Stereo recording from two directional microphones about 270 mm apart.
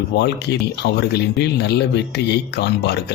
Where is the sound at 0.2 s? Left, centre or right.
Left.